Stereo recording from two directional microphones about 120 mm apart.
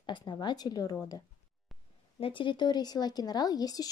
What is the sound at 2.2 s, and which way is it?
A woman's voice, 45° left (ahead or behind).